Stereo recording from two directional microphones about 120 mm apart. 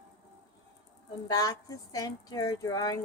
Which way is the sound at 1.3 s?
30° left (ahead or behind).